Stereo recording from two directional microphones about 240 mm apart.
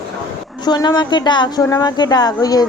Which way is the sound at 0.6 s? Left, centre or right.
Centre.